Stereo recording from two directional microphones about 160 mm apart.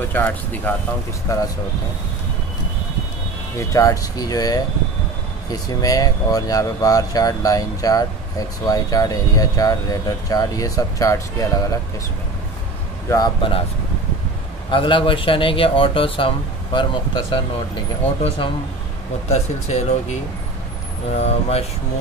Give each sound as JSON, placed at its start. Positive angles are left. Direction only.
{"t": 0.1, "sound": "speech", "side_deg": 10}
{"t": 3.5, "sound": "speech", "side_deg": 20}
{"t": 13.1, "sound": "speech", "side_deg": 30}
{"t": 14.7, "sound": "speech", "side_deg": 30}
{"t": 19.2, "sound": "speech", "side_deg": 45}
{"t": 21.2, "sound": "speech", "side_deg": 40}